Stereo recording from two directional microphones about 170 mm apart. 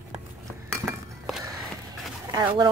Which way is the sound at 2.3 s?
20° right (ahead or behind).